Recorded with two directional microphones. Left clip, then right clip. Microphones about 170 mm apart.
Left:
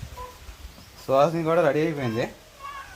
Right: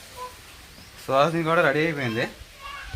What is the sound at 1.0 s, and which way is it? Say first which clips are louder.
Speech: even; 10° left (ahead or behind).